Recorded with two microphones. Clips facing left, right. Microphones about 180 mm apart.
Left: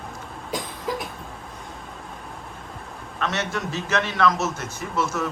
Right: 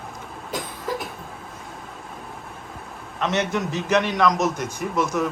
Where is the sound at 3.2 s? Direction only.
20° right (ahead or behind).